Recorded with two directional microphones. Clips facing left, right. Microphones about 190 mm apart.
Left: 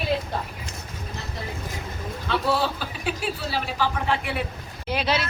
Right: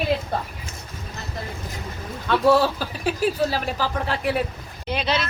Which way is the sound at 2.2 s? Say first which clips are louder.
Right 7 dB; 45° right (ahead or behind).